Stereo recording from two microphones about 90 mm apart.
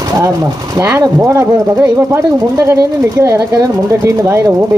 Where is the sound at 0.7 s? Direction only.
30° right (ahead or behind).